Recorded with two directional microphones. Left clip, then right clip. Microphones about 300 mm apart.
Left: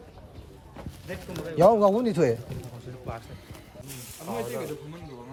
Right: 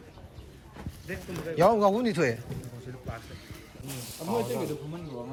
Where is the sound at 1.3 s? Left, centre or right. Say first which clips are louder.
Left 3 dB; centre.